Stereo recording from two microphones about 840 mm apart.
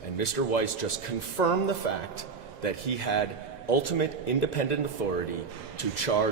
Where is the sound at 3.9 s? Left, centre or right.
Left.